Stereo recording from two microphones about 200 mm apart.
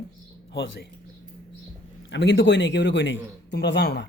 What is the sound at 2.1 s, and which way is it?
Speech, 65° left (ahead or behind).